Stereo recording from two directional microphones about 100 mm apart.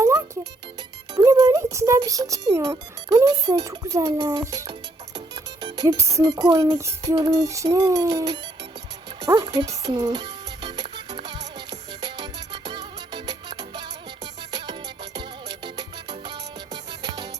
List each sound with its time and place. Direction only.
0.0 s music: 35° right (ahead or behind)
1.2 s speech: 35° right (ahead or behind)
3.6 s music: 35° right (ahead or behind)
9.2 s speech: 40° right (ahead or behind)
10.0 s music: 45° right (ahead or behind)